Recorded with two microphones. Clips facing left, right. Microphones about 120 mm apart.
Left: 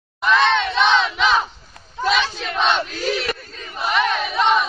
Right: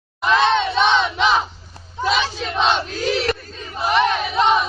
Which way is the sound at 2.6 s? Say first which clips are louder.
Right 1 dB; 30° right (ahead or behind).